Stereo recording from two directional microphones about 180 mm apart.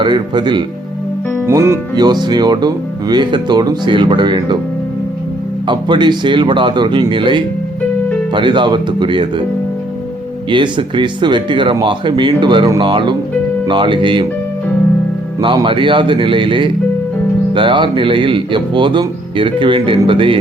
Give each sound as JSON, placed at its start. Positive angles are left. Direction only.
{"t": 0.0, "sound": "speech", "side_deg": -25}
{"t": 5.6, "sound": "speech", "side_deg": -25}
{"t": 10.5, "sound": "speech", "side_deg": -25}
{"t": 15.4, "sound": "speech", "side_deg": -25}